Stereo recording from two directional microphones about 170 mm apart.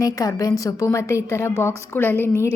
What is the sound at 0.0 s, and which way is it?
A woman's voice, 20° left (ahead or behind).